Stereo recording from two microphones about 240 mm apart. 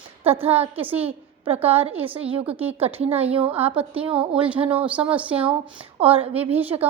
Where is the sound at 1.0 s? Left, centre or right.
Right.